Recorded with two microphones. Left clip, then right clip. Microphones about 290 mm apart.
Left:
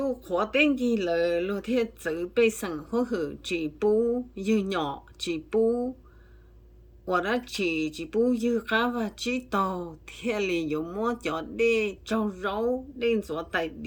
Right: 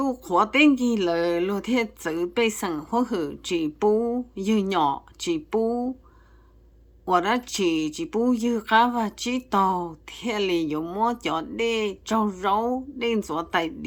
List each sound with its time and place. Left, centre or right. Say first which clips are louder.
0.0 s speech: right 5 dB; centre
7.1 s speech: right 5 dB; centre